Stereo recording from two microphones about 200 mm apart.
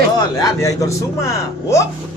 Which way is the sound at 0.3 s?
15° left (ahead or behind).